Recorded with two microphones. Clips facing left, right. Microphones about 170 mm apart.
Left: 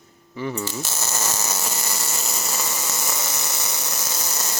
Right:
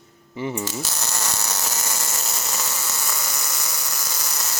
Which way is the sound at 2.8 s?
20° left (ahead or behind).